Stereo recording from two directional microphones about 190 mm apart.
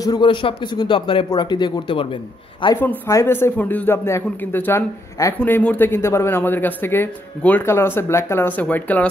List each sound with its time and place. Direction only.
0.0 s speech: 20° left (ahead or behind)
2.8 s a man's voice: 10° left (ahead or behind)